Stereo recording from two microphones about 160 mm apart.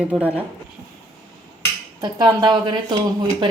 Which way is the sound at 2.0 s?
25° right (ahead or behind).